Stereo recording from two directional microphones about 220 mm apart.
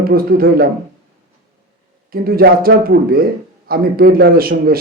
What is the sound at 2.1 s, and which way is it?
A man's voice, 45° right (ahead or behind).